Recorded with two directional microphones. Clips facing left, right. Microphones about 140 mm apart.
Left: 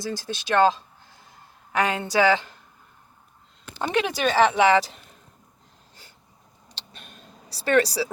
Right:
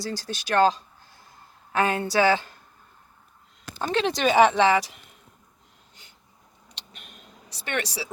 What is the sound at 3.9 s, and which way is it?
Speech, 10° left (ahead or behind).